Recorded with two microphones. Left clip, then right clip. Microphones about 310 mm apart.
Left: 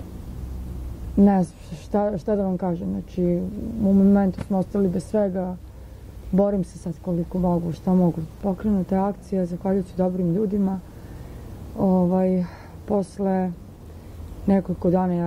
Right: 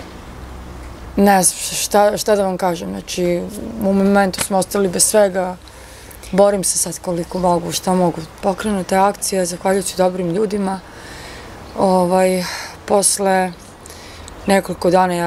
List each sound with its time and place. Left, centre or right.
1.1 s a woman's voice: centre
6.9 s speech: centre
12.2 s speech: centre